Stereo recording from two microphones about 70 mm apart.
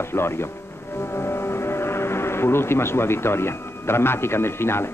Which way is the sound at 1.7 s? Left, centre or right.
Left.